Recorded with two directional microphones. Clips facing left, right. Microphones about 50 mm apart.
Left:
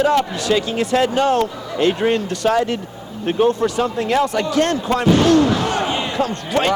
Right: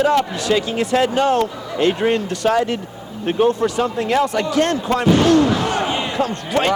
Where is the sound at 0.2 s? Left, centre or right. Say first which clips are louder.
Even; right.